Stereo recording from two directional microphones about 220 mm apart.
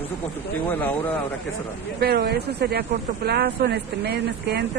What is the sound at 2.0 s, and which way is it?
Speech, 45° right (ahead or behind).